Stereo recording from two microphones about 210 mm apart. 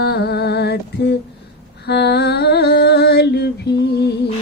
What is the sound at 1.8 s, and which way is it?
Music, 50° left (ahead or behind).